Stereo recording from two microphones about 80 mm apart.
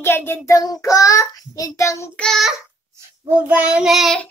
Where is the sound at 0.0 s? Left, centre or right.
Left.